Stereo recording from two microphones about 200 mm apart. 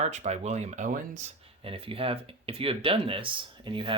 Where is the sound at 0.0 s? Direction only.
35° right (ahead or behind).